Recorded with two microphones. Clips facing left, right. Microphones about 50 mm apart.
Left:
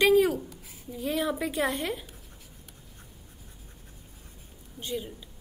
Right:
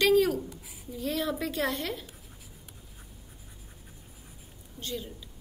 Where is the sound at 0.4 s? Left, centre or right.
Centre.